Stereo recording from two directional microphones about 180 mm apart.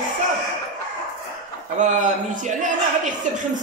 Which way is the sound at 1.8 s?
40° right (ahead or behind).